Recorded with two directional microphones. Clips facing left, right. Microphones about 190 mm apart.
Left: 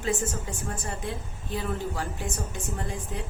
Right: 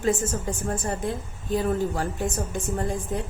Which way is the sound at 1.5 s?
45° right (ahead or behind).